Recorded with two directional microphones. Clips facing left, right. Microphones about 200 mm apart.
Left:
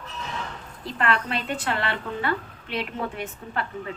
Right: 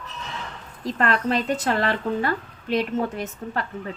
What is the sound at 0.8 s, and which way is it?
Speech, 40° right (ahead or behind).